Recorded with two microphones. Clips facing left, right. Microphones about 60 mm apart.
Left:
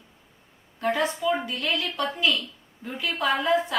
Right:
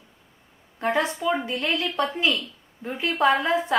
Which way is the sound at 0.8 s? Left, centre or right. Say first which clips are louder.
Right 1 dB; right.